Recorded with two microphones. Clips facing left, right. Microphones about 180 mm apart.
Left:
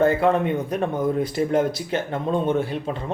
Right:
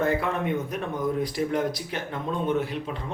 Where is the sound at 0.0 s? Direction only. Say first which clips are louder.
Left 7 dB; 30° left (ahead or behind).